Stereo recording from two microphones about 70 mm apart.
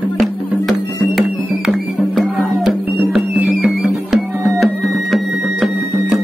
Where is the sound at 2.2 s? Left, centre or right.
Centre.